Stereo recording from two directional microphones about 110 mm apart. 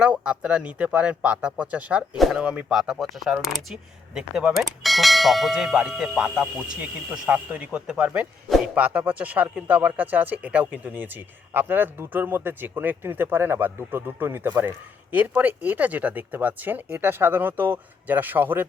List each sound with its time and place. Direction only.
0.3 s speech: 10° right (ahead or behind)